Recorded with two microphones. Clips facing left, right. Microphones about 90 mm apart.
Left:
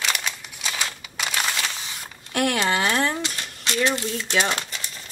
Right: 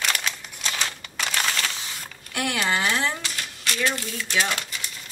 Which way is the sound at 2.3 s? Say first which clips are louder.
Left 3 dB; 50° left (ahead or behind).